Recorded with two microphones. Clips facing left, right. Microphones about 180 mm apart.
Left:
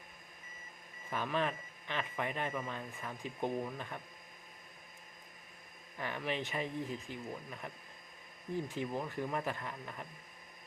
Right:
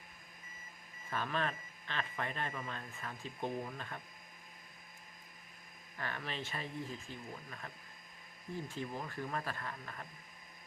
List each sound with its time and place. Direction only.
1.1 s speech: 15° left (ahead or behind)
6.0 s speech: 15° left (ahead or behind)